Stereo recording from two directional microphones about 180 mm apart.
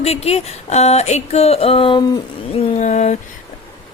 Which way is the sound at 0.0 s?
35° left (ahead or behind).